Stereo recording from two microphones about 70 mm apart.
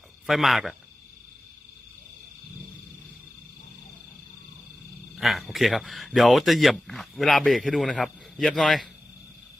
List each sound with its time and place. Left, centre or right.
0.3 s speech: centre
5.1 s speech: centre